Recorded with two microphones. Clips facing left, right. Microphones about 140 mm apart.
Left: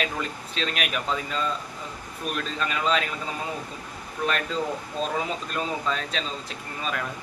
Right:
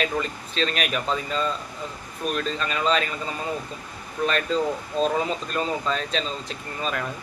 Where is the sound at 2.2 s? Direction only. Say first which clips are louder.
Right 3 dB; 5° left (ahead or behind).